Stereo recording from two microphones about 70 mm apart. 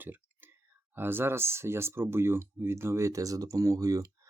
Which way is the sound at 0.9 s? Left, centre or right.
Right.